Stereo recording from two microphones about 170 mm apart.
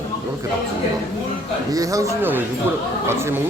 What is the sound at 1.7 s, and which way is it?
Speech, 20° right (ahead or behind).